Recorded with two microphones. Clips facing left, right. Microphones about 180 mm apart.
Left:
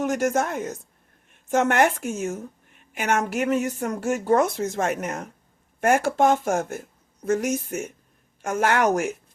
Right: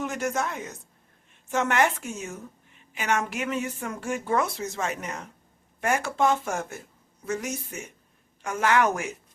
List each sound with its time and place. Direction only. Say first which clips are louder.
0.0 s a woman's voice: left 6 dB; 45° left (ahead or behind)